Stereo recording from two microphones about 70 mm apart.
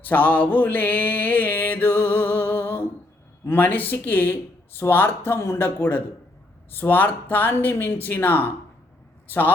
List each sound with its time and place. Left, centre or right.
0.0 s mantra: left
9.2 s a man's voice: left